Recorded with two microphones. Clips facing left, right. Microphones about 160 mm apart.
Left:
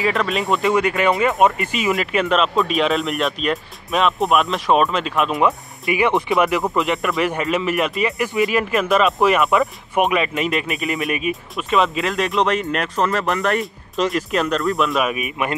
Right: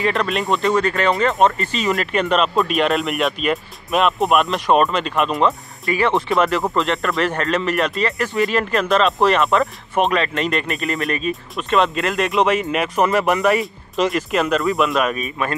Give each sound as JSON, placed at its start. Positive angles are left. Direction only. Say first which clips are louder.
{"t": 0.0, "sound": "speech", "louder": "even", "side_deg": 0}
{"t": 5.9, "sound": "speech", "louder": "even", "side_deg": 15}
{"t": 15.1, "sound": "speech", "louder": "even", "side_deg": 15}